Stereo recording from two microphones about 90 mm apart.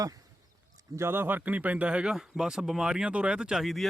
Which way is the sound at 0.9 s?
25° right (ahead or behind).